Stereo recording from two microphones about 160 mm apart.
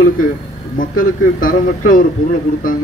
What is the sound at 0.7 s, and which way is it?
Speech, 60° left (ahead or behind).